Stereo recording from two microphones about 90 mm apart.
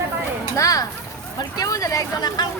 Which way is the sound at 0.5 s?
40° left (ahead or behind).